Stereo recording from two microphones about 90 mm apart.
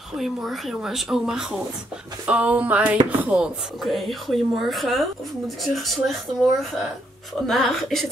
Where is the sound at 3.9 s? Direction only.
Centre (ahead or behind).